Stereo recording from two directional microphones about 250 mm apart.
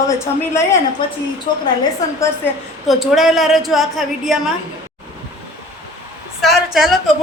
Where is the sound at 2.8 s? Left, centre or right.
Centre.